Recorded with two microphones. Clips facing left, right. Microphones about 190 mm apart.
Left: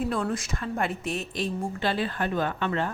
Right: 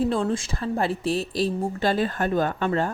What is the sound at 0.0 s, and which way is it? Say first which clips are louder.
A woman's voice: right 4 dB; 30° right (ahead or behind).